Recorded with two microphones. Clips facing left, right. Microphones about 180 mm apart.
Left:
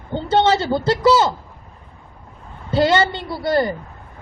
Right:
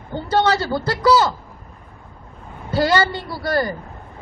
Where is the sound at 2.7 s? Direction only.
25° left (ahead or behind).